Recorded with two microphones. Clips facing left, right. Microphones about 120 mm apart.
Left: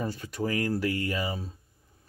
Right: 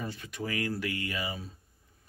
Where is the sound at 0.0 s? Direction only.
35° left (ahead or behind).